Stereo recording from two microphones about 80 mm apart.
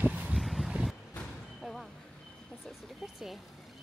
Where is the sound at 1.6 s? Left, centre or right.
Centre.